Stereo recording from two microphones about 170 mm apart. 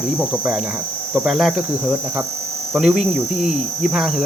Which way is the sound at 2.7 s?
5° right (ahead or behind).